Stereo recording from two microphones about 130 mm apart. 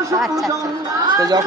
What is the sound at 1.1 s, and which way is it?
Speech, 30° right (ahead or behind).